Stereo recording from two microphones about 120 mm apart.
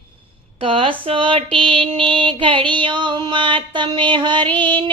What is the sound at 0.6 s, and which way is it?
Speech, 50° right (ahead or behind).